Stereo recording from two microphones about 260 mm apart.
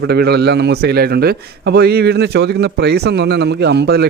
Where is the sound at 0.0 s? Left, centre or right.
Right.